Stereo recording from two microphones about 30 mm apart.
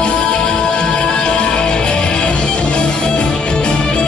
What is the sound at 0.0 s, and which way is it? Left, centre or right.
Music, left.